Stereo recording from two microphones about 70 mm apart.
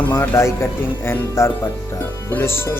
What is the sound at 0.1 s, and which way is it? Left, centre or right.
Speech, left.